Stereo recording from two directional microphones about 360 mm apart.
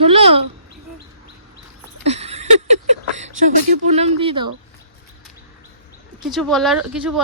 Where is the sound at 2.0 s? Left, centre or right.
Centre.